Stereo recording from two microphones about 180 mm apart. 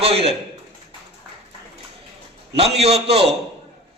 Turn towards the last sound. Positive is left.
turn(degrees=-35)  # may be behind; listen again after turning